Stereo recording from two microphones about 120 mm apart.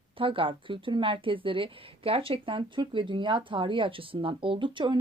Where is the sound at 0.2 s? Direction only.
45° right (ahead or behind).